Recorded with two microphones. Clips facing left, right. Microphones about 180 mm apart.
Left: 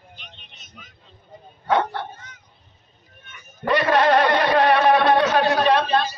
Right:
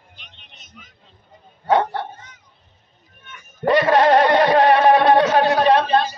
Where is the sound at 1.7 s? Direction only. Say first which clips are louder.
Right 3 dB; 40° right (ahead or behind).